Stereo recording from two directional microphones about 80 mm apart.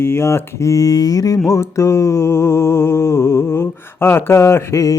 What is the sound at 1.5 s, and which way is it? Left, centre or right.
Mantra, left.